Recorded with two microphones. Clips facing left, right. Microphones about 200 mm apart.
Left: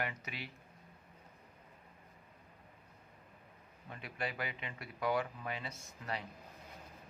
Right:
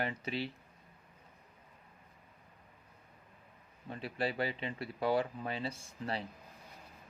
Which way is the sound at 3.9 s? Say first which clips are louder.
Right 6 dB; 30° right (ahead or behind).